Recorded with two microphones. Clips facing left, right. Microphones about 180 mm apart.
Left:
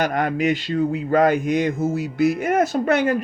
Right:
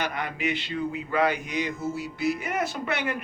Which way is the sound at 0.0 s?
45° left (ahead or behind).